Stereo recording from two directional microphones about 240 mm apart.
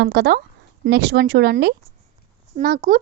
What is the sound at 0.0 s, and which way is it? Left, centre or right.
A woman's voice, right.